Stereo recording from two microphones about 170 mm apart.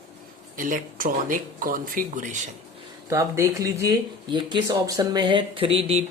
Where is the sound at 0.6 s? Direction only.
55° right (ahead or behind).